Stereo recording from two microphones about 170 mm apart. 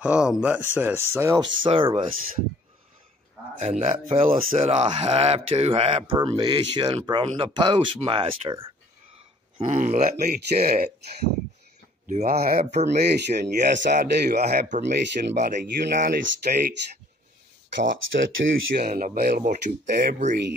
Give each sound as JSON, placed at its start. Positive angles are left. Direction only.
{"t": 0.0, "sound": "speech", "side_deg": -5}
{"t": 1.4, "sound": "speech", "side_deg": -30}
{"t": 3.5, "sound": "speech", "side_deg": -40}
{"t": 9.6, "sound": "speech", "side_deg": -45}
{"t": 10.1, "sound": "speech", "side_deg": -65}
{"t": 12.3, "sound": "speech", "side_deg": -60}
{"t": 15.5, "sound": "speech", "side_deg": -55}
{"t": 18.1, "sound": "speech", "side_deg": -90}
{"t": 18.9, "sound": "speech", "side_deg": -50}